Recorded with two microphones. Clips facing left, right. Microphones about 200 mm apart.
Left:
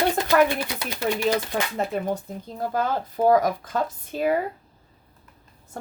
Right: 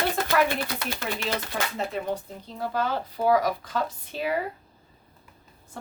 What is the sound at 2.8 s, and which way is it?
A woman's voice, 45° left (ahead or behind).